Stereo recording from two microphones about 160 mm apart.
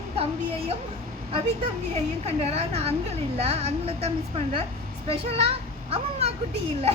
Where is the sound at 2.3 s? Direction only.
40° right (ahead or behind).